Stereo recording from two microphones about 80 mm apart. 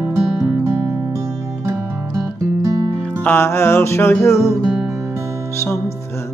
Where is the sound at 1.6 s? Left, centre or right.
Right.